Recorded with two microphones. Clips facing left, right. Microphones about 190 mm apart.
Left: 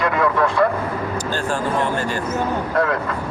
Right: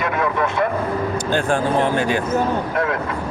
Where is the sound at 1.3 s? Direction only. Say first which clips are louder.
Right 5 dB; 55° right (ahead or behind).